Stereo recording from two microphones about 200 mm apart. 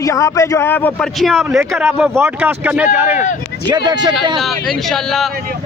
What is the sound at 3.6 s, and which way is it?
Speech, 20° right (ahead or behind).